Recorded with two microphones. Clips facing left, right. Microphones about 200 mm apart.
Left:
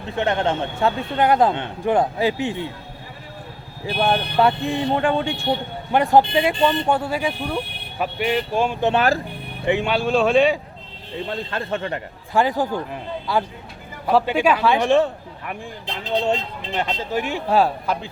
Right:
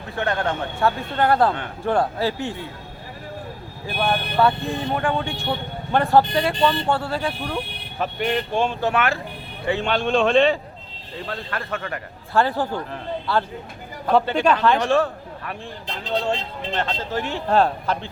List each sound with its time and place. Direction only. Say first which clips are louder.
0.2 s a man's voice: left 3 dB; 20° left (ahead or behind)
4.0 s a man's voice: left 1 dB; 20° left (ahead or behind)
8.8 s speech: left 3 dB; 25° left (ahead or behind)
9.6 s a man's voice: left 2 dB; 10° left (ahead or behind)
11.3 s a man's voice: left 3 dB; 25° left (ahead or behind)
14.8 s a man's voice: left 3 dB; 20° left (ahead or behind)
16.7 s a man's voice: left 2 dB; 10° left (ahead or behind)